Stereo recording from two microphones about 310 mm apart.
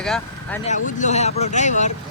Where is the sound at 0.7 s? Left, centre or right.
Left.